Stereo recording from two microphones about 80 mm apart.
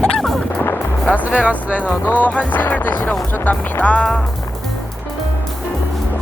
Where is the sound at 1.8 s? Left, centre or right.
Left.